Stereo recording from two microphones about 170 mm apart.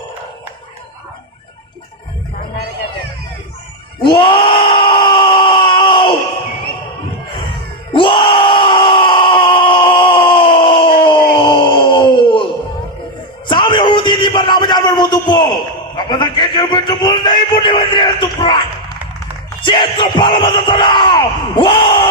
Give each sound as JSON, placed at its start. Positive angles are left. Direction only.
{"t": 4.0, "sound": "screaming", "side_deg": 30}
{"t": 7.9, "sound": "groan", "side_deg": 30}
{"t": 13.5, "sound": "a sound", "side_deg": 30}
{"t": 19.6, "sound": "crowd", "side_deg": 30}